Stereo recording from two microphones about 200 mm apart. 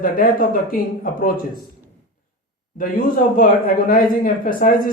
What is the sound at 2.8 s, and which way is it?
Speech, 45° left (ahead or behind).